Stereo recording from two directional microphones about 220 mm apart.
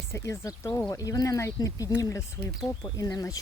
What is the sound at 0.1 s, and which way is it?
Speech, 15° left (ahead or behind).